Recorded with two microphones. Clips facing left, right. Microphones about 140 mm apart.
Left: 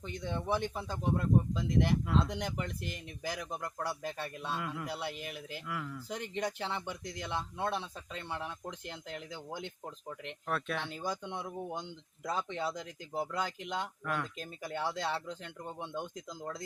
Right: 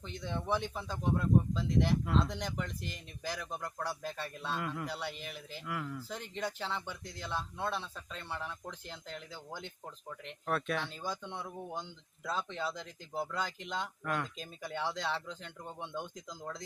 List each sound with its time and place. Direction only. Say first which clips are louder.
0.0 s a man's voice: left 2 dB; 10° left (ahead or behind)
6.1 s speech: left 3 dB; 15° left (ahead or behind)
10.4 s a man's voice: right 2 dB; 5° right (ahead or behind)
10.8 s speech: left 2 dB; 10° left (ahead or behind)